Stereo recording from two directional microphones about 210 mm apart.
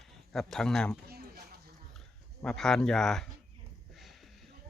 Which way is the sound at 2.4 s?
5° left (ahead or behind).